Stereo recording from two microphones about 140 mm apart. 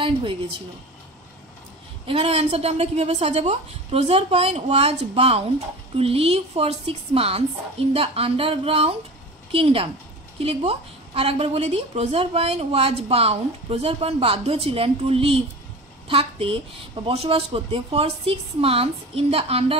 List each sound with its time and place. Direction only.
0.0 s a woman's voice: 40° right (ahead or behind)
2.0 s a woman's voice: 45° right (ahead or behind)